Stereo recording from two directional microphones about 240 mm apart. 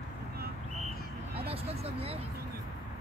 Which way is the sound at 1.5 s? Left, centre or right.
Right.